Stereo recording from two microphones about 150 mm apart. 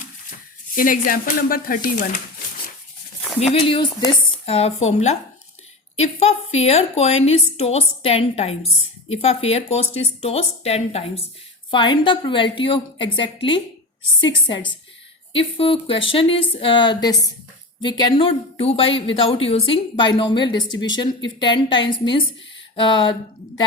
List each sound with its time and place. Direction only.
0.8 s speech: 65° left (ahead or behind)
3.4 s a woman's voice: 40° left (ahead or behind)